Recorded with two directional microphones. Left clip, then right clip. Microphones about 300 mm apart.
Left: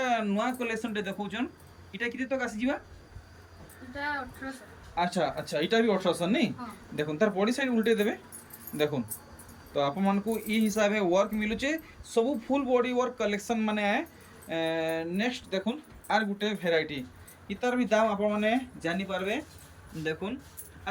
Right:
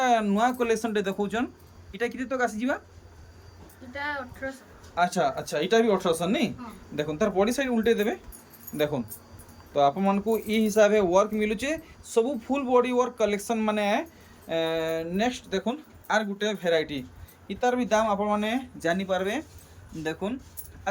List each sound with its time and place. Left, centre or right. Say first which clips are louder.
0.0 s speech: right 6 dB; centre
4.9 s speech: right 4 dB; centre
20.9 s speech: right 5 dB; centre